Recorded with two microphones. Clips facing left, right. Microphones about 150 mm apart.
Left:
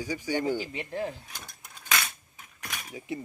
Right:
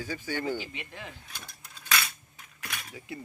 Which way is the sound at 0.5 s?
35° left (ahead or behind).